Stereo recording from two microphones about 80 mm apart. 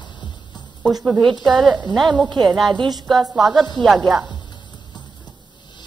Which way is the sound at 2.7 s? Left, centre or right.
Right.